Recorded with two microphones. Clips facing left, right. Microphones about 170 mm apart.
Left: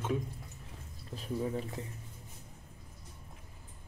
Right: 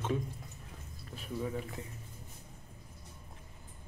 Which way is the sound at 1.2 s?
30° left (ahead or behind).